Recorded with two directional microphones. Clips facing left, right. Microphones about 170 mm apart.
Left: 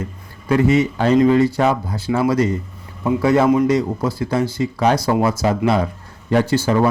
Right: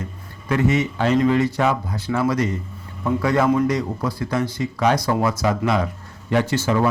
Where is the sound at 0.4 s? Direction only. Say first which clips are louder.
Left 4 dB; 30° left (ahead or behind).